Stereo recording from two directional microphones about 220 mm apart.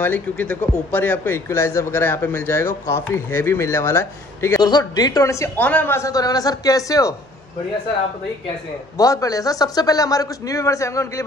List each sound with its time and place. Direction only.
0.0 s speech: 10° left (ahead or behind)
8.9 s speech: 15° left (ahead or behind)